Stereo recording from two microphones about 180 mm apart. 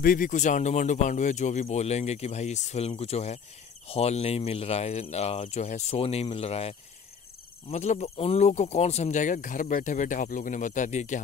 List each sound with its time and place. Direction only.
0.0 s speech: 50° left (ahead or behind)